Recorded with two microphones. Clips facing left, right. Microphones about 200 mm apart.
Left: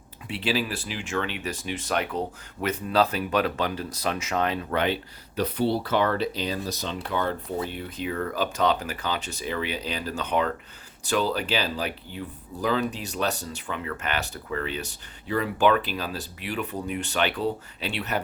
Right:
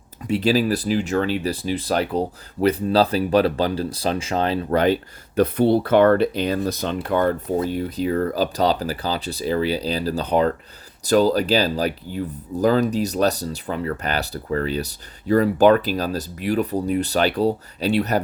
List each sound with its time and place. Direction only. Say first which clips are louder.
0.3 s speech: right 9 dB; 40° right (ahead or behind)
5.4 s speech: right 8 dB; 55° right (ahead or behind)